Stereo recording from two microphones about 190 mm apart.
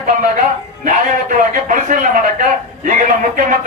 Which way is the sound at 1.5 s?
45° right (ahead or behind).